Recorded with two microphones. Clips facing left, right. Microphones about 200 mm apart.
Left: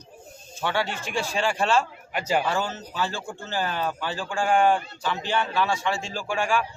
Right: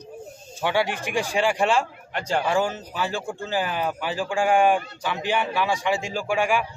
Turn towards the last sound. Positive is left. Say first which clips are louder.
# right 3 dB
turn(degrees=-15)  # may be behind; listen again after turning